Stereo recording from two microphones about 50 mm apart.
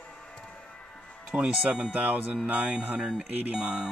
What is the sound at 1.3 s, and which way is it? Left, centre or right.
Speech, centre.